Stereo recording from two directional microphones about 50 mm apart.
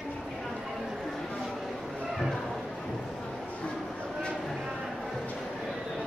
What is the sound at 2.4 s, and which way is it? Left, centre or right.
Bow-wow, centre.